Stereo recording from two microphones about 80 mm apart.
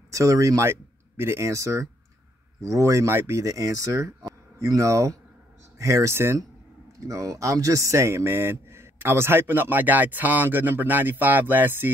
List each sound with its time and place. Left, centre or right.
0.1 s speech: right